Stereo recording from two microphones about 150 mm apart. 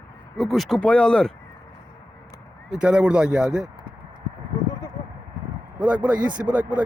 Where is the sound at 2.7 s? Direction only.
5° right (ahead or behind).